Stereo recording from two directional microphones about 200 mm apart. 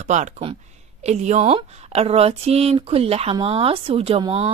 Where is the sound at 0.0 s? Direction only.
35° right (ahead or behind).